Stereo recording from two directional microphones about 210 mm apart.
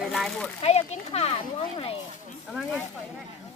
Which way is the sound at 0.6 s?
30° left (ahead or behind).